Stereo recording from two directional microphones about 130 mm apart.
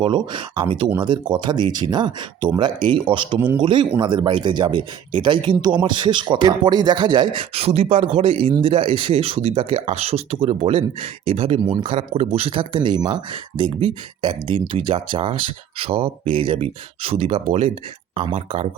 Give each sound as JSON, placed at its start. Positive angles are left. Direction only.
{"t": 0.0, "sound": "speech", "side_deg": -40}
{"t": 7.5, "sound": "speech", "side_deg": -55}